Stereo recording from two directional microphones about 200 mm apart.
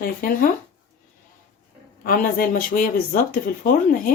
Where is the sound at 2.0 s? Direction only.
45° left (ahead or behind).